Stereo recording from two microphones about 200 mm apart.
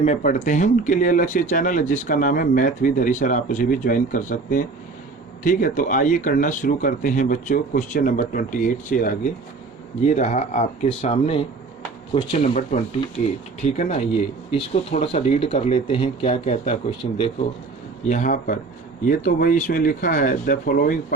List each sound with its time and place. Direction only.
0.0 s speech: 40° left (ahead or behind)
18.1 s speech: 40° left (ahead or behind)